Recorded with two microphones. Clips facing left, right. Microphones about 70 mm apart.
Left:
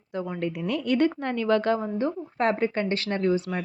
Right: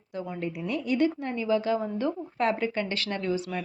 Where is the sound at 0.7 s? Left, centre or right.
Left.